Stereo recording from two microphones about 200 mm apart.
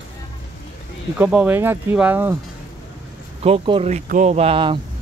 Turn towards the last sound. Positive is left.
turn(degrees=-25)  # may be behind; listen again after turning